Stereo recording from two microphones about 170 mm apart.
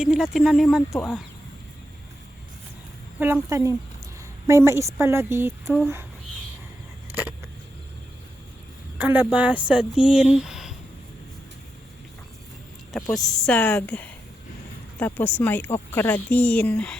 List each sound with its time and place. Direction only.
0.0 s speech: centre (ahead or behind)
3.5 s a woman's voice: 15° right (ahead or behind)
7.1 s a sound: 10° right (ahead or behind)
9.0 s speech: 10° right (ahead or behind)
13.0 s a woman's voice: 20° left (ahead or behind)
13.4 s speech: 10° left (ahead or behind)